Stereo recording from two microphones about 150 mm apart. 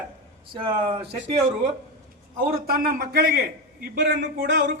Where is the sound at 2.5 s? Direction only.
85° right.